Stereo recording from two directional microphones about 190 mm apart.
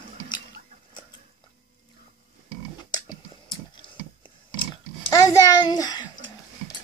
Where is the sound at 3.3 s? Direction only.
25° left (ahead or behind).